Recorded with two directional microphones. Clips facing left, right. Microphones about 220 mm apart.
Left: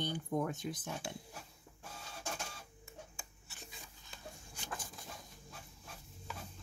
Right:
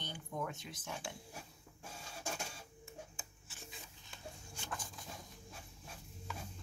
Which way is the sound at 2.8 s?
Centre (ahead or behind).